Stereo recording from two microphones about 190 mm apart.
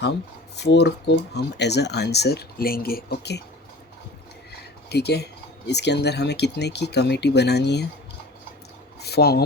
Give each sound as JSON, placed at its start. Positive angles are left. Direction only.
{"t": 0.5, "sound": "speech", "side_deg": 60}
{"t": 4.9, "sound": "speech", "side_deg": 60}
{"t": 9.0, "sound": "a sound", "side_deg": 60}